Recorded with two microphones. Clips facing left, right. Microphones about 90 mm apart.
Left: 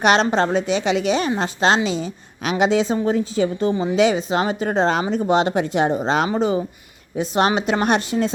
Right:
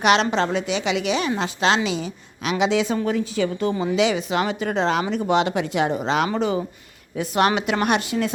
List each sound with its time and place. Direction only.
0.0 s a woman's voice: 40° left (ahead or behind)
3.9 s a woman's voice: 40° left (ahead or behind)